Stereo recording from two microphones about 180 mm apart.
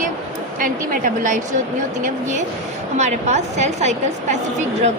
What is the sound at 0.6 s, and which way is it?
Speech, 45° right (ahead or behind).